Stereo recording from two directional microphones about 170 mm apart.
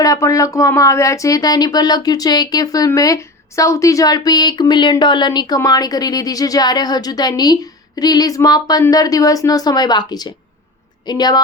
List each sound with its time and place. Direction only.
0.0 s a woman's voice: 20° left (ahead or behind)